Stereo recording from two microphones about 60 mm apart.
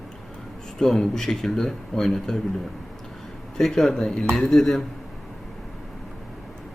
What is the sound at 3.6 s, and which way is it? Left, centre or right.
Speech, centre.